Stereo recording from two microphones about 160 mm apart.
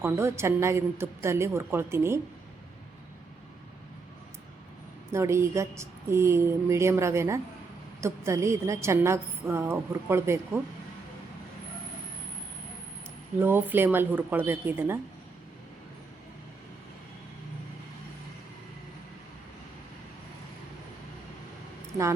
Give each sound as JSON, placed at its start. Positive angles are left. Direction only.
{"t": 0.0, "sound": "a woman's voice", "side_deg": -15}
{"t": 5.1, "sound": "a woman's voice", "side_deg": -15}
{"t": 13.4, "sound": "a woman's voice", "side_deg": -10}